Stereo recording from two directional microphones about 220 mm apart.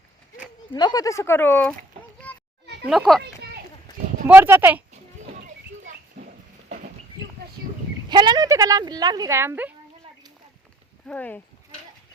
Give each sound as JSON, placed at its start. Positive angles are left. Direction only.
{"t": 0.7, "sound": "speech", "side_deg": 20}
{"t": 2.2, "sound": "children playing", "side_deg": 5}
{"t": 2.9, "sound": "a child's voice", "side_deg": 0}
{"t": 4.3, "sound": "speech", "side_deg": -10}
{"t": 5.3, "sound": "a sound", "side_deg": -40}
{"t": 8.1, "sound": "speech", "side_deg": -20}
{"t": 11.0, "sound": "speech", "side_deg": 5}